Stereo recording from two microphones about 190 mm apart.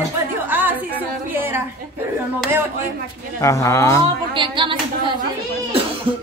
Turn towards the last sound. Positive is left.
turn(degrees=-25)  # may be behind; listen again after turning